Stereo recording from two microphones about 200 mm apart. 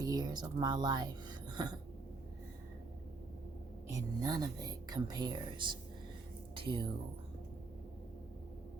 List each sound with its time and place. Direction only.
0.0 s speech: 20° right (ahead or behind)
3.8 s speech: 15° right (ahead or behind)